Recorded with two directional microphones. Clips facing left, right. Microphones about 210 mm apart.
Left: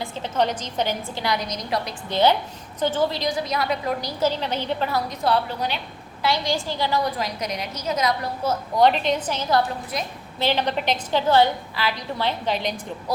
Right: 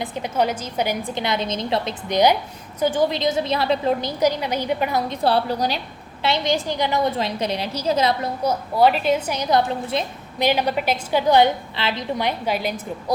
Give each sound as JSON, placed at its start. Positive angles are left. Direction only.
{"t": 0.0, "sound": "a woman's voice", "side_deg": -15}
{"t": 6.2, "sound": "a woman's voice", "side_deg": -20}
{"t": 8.4, "sound": "a woman's voice", "side_deg": -5}